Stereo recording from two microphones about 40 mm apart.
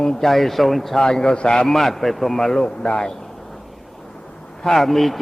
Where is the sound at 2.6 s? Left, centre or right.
Left.